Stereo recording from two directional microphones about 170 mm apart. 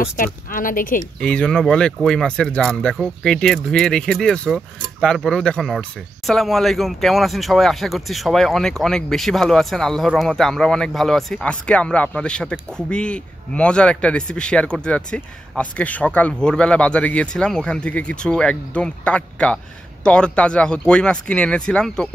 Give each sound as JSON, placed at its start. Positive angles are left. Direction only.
{"t": 0.2, "sound": "speech", "side_deg": 55}
{"t": 1.2, "sound": "speech", "side_deg": 5}